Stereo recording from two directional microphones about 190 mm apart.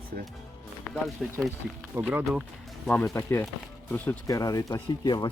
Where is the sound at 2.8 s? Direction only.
10° left (ahead or behind).